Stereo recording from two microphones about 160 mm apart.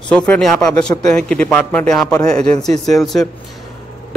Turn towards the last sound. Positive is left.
turn(degrees=0)  # may be behind; listen again after turning